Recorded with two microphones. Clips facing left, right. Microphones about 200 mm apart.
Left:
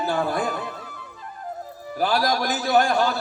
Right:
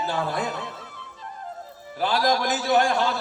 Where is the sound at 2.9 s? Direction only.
45° left (ahead or behind).